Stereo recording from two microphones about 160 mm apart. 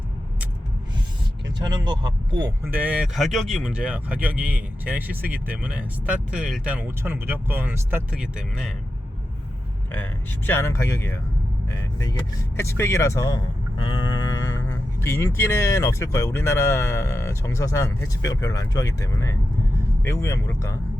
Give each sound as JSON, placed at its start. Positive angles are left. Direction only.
{"t": 1.5, "sound": "speech", "side_deg": -25}
{"t": 2.6, "sound": "speech", "side_deg": -10}
{"t": 9.9, "sound": "speech", "side_deg": 10}